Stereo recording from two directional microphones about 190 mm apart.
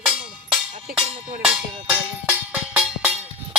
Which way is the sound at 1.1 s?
30° right (ahead or behind).